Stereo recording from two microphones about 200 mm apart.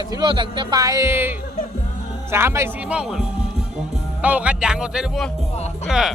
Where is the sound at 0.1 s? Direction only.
20° right (ahead or behind); by 6.1 s centre (ahead or behind).